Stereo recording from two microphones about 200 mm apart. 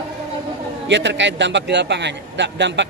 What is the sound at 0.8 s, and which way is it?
A man's voice, 60° right (ahead or behind).